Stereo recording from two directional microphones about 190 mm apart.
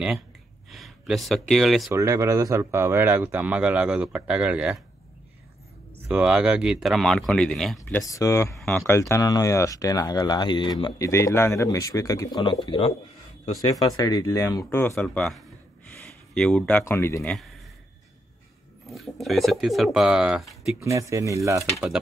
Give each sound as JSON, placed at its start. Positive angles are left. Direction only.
{"t": 0.7, "sound": "speech", "side_deg": 0}
{"t": 1.9, "sound": "speech", "side_deg": -15}
{"t": 6.0, "sound": "speech", "side_deg": -5}
{"t": 8.0, "sound": "speech", "side_deg": 15}
{"t": 8.5, "sound": "speech", "side_deg": 0}
{"t": 9.1, "sound": "speech", "side_deg": 20}
{"t": 18.9, "sound": "speech", "side_deg": 0}
{"t": 20.8, "sound": "speech", "side_deg": -15}